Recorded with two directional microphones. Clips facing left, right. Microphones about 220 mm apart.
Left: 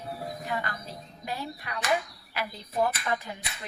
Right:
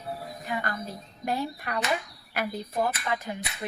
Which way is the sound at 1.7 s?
50° right (ahead or behind).